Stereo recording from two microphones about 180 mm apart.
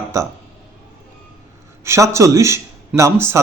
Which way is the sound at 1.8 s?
15° right (ahead or behind).